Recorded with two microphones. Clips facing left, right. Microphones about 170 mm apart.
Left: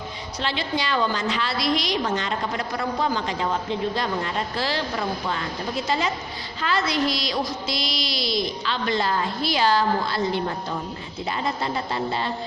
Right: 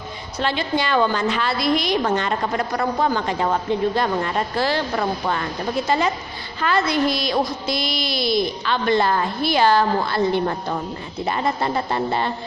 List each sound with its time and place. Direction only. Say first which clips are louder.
0.3 s a woman's voice: right 5 dB; 50° right (ahead or behind)